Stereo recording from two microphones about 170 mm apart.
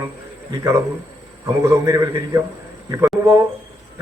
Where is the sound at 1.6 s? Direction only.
20° right (ahead or behind).